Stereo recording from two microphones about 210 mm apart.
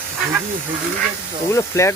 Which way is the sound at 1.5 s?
15° left (ahead or behind).